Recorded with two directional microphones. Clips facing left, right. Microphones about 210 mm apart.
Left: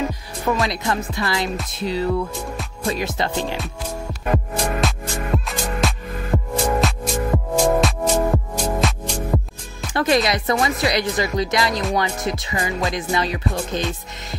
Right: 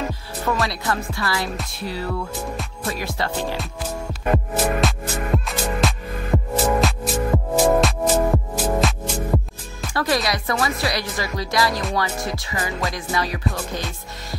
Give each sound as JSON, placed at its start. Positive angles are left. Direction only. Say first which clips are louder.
{"t": 0.5, "sound": "speech", "louder": "left 2 dB", "side_deg": 20}
{"t": 4.3, "sound": "music", "louder": "right 2 dB", "side_deg": 0}
{"t": 9.9, "sound": "speech", "louder": "left 4 dB", "side_deg": 20}